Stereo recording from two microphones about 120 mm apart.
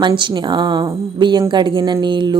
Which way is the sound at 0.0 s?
40° right (ahead or behind).